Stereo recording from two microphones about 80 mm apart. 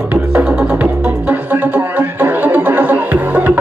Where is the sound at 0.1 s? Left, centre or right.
Right.